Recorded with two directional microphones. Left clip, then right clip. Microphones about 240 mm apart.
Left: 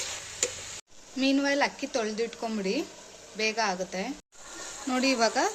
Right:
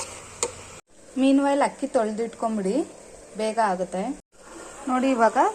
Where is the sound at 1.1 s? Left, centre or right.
Centre.